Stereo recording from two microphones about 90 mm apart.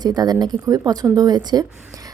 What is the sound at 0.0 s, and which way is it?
A woman's voice, 50° right (ahead or behind).